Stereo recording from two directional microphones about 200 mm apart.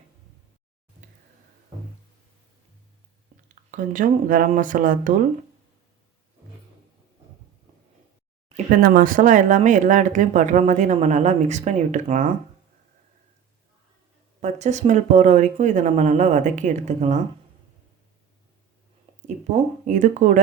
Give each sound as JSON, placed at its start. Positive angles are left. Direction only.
{"t": 3.5, "sound": "speech", "side_deg": -40}
{"t": 8.5, "sound": "speech", "side_deg": -45}
{"t": 14.4, "sound": "speech", "side_deg": -35}
{"t": 19.5, "sound": "speech", "side_deg": -40}